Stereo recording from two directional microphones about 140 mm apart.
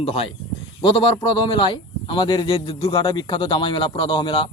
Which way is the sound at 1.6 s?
35° left (ahead or behind).